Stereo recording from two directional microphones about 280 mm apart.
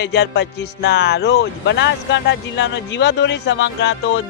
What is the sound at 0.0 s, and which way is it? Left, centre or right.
Speech, left.